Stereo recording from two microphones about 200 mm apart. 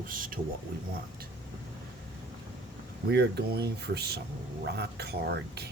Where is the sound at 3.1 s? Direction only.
55° right (ahead or behind).